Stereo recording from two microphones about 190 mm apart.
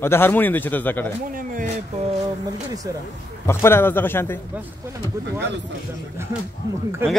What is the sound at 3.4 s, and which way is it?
Speech, 10° left (ahead or behind).